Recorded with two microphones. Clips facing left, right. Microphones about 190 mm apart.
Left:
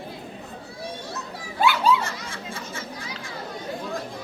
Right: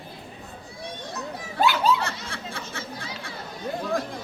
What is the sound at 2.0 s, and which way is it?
Snicker, 65° right (ahead or behind).